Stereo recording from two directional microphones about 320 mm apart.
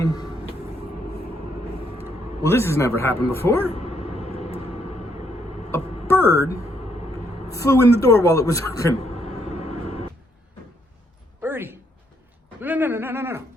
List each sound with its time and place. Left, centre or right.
0.0 s music: centre
2.4 s speech: centre
4.4 s vehicle: centre
5.7 s vehicle: centre
6.2 s speech: centre
7.5 s a man's voice: centre
8.0 s a sound: centre
11.4 s a sound: centre